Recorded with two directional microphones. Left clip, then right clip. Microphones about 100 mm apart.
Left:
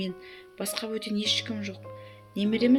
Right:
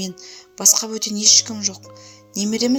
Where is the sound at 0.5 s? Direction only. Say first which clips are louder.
Right 14 dB; 75° right (ahead or behind).